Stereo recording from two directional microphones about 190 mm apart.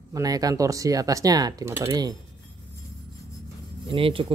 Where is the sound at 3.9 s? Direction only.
30° right (ahead or behind).